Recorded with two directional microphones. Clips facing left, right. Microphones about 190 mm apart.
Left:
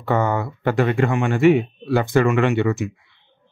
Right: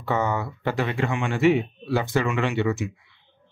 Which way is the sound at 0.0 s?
55° left (ahead or behind).